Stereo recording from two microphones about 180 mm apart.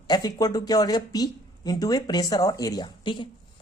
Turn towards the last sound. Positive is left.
turn(degrees=25)  # may be behind; listen again after turning